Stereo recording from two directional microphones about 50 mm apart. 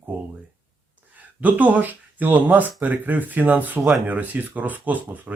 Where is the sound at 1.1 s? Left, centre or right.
Right.